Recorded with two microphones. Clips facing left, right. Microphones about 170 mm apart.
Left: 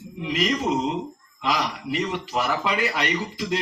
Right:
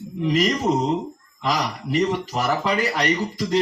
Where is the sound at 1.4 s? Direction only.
40° right (ahead or behind).